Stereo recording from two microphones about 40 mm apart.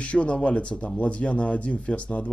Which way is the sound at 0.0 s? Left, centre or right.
Left.